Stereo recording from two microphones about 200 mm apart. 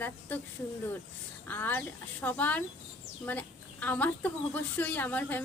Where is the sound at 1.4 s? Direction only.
10° left (ahead or behind).